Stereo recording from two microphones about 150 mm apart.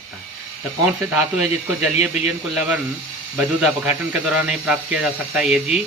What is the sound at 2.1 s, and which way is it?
Speech, 5° right (ahead or behind).